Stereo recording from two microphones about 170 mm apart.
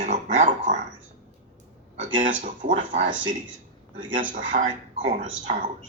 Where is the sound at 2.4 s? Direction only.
50° right (ahead or behind).